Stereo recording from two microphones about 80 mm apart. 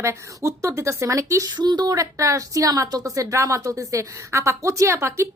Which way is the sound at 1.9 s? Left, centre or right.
Right.